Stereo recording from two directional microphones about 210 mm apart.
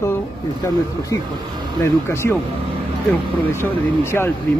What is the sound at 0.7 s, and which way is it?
Speech, 15° left (ahead or behind).